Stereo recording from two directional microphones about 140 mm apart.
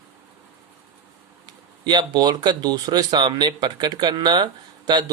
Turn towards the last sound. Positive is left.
turn(degrees=-30)  # may be behind; listen again after turning